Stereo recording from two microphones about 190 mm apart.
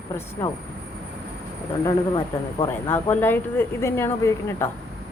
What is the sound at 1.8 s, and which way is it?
Speech, 25° left (ahead or behind).